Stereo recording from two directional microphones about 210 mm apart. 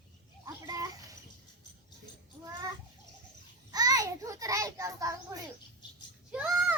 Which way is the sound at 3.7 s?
15° right (ahead or behind).